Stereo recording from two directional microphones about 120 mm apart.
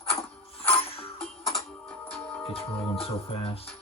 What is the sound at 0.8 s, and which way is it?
Music, 55° left (ahead or behind).